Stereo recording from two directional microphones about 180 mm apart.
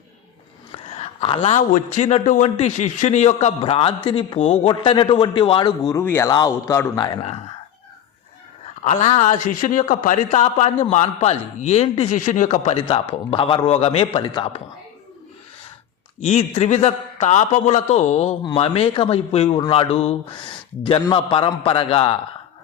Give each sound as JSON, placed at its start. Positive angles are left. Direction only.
{"t": 0.8, "sound": "speech", "side_deg": 30}
{"t": 8.8, "sound": "speech", "side_deg": 35}
{"t": 16.2, "sound": "speech", "side_deg": 40}